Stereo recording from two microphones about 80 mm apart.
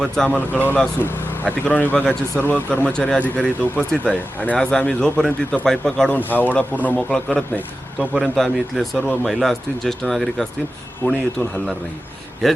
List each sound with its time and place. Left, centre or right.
0.3 s speech: centre
6.1 s speech: left
7.1 s speech: centre
7.9 s speech: centre